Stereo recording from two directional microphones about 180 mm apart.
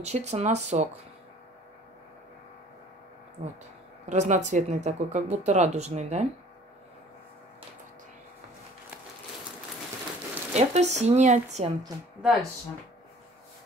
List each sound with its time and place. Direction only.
0.0 s speech: 35° right (ahead or behind)
3.4 s speech: 40° right (ahead or behind)
10.5 s speech: 40° right (ahead or behind)
12.2 s speech: centre (ahead or behind)